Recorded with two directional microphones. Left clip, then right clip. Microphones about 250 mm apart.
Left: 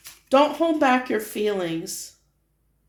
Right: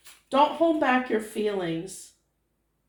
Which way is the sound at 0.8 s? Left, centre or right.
Left.